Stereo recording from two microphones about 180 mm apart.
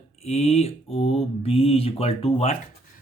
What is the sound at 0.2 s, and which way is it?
Speech, 35° left (ahead or behind).